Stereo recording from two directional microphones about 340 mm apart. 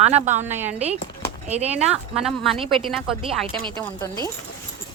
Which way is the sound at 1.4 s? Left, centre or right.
Centre.